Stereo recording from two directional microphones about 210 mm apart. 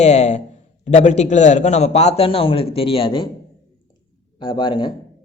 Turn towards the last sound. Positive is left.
turn(degrees=20)  # may be behind; listen again after turning